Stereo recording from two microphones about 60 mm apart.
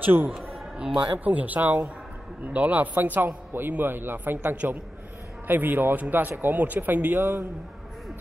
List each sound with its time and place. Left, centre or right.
0.0 s a man's voice: right